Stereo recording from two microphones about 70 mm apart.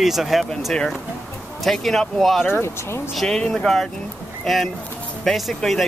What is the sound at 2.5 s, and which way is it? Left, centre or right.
Speech, left.